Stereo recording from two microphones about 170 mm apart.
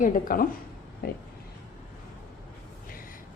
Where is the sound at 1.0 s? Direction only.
70° left (ahead or behind).